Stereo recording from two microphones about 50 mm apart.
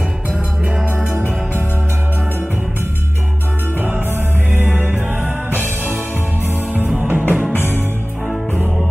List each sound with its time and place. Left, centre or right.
4.7 s music: right
7.1 s music: right